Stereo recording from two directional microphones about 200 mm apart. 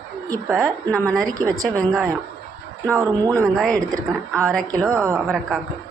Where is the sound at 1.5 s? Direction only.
15° right (ahead or behind).